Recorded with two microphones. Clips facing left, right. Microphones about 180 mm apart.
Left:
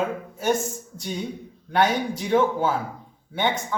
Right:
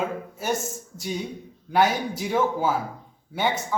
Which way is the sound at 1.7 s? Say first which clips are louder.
Even; 5° right (ahead or behind).